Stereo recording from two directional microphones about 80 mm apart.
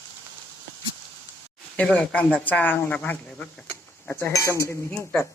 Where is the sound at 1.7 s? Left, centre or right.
Centre.